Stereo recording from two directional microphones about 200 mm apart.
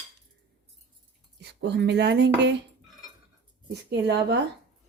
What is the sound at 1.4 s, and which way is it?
Speech, 55° right (ahead or behind).